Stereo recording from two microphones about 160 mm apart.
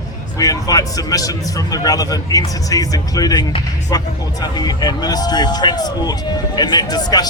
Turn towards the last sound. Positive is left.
turn(degrees=25)  # may be behind; listen again after turning